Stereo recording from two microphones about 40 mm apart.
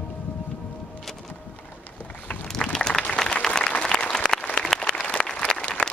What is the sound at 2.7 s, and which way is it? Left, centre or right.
Applause, centre.